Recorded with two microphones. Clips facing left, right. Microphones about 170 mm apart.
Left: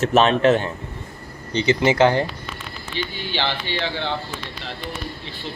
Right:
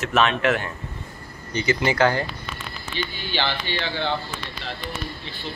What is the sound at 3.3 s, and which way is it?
Speech, 25° left (ahead or behind).